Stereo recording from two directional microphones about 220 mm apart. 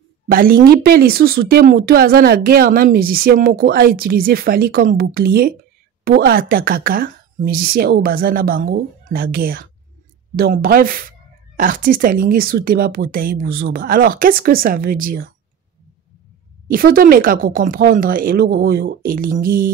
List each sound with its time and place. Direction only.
0.3 s speech: 40° right (ahead or behind)
16.6 s speech: 40° right (ahead or behind)